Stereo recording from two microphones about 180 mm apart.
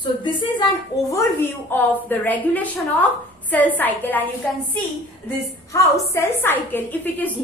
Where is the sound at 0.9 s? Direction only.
20° left (ahead or behind).